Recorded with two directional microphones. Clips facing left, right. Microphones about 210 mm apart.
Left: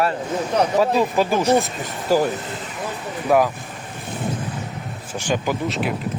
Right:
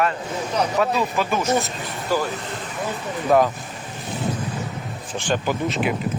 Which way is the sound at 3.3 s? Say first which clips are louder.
Even; 10° left (ahead or behind).